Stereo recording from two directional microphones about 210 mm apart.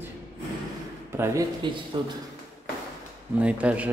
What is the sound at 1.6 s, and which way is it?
Speech, 20° right (ahead or behind).